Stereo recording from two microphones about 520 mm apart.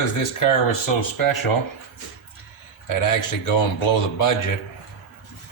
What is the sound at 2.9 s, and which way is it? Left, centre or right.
Speech, left.